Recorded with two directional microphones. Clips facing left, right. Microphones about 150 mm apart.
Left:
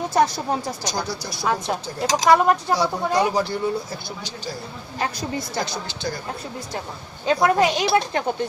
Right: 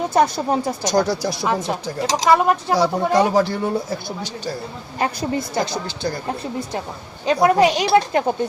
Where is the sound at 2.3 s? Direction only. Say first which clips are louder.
Right 1 dB; 5° right (ahead or behind).